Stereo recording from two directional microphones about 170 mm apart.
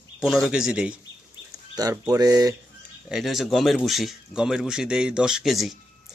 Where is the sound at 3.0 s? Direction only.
Centre (ahead or behind).